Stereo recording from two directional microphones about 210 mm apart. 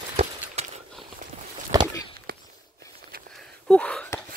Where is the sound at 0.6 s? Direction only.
30° right (ahead or behind).